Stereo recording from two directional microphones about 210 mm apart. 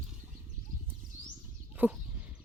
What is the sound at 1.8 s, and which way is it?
Speech, 10° right (ahead or behind).